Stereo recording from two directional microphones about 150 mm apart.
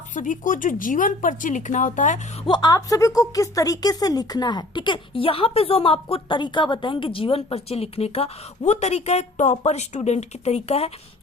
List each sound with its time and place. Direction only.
0.1 s speech: 60° left (ahead or behind)
2.4 s a woman's voice: 30° left (ahead or behind)